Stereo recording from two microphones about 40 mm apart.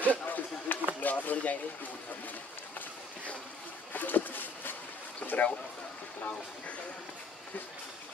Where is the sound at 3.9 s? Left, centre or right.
Left.